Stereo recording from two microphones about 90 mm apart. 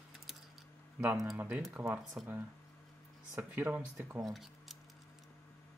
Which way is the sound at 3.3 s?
20° right (ahead or behind).